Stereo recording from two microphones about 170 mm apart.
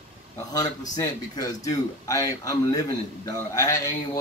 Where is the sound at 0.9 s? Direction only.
20° left (ahead or behind).